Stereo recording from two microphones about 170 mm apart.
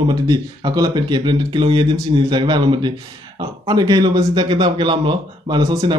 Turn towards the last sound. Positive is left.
turn(degrees=-25)  # may be behind; listen again after turning